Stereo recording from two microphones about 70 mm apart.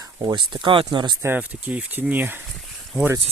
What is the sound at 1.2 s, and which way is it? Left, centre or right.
Speech, right.